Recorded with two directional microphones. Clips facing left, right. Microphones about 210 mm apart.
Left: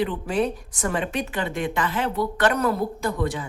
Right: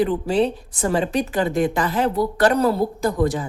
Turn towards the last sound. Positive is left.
turn(degrees=-40)  # may be behind; listen again after turning